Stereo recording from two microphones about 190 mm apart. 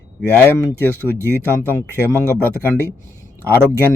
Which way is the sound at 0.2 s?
10° left (ahead or behind).